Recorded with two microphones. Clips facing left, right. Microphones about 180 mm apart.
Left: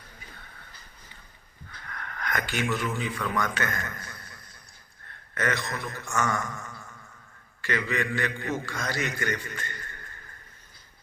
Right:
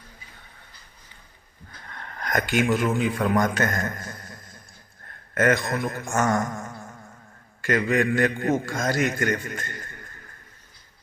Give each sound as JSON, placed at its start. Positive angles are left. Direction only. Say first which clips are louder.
{"t": 1.9, "sound": "a man's voice", "louder": "right 4 dB", "side_deg": -30}